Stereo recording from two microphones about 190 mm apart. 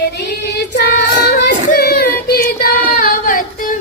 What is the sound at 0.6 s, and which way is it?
Child singing, 55° left (ahead or behind).